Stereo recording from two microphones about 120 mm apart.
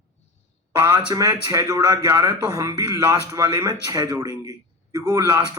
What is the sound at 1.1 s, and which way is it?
A man's voice, 30° right (ahead or behind).